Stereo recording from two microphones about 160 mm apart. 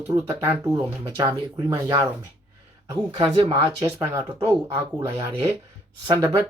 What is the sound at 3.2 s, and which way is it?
Speech, 30° right (ahead or behind).